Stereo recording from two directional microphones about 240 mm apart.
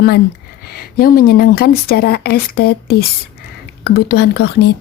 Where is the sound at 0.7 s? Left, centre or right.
Left.